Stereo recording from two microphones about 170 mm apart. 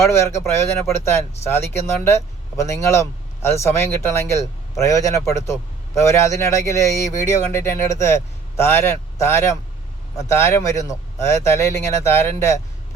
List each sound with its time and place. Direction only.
0.0 s speech: 15° left (ahead or behind)